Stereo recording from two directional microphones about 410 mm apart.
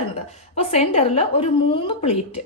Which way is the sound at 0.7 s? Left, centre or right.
Centre.